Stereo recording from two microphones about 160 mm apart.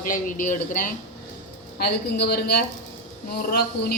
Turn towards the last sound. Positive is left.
turn(degrees=75)  # may be behind; listen again after turning